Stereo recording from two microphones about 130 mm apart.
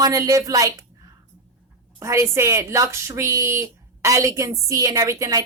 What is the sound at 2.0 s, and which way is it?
A woman's voice, 20° right (ahead or behind).